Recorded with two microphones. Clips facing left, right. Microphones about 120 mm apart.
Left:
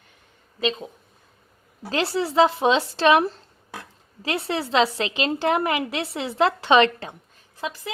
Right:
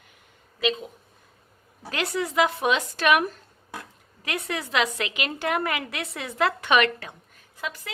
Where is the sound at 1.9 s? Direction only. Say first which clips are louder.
Left 4 dB; 30° left (ahead or behind).